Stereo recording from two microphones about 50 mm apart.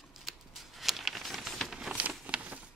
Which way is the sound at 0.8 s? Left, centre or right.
Centre.